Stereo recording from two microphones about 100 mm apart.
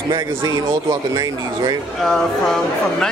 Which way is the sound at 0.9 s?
40° right (ahead or behind).